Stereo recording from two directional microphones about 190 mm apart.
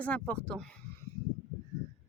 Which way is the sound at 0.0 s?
5° left (ahead or behind).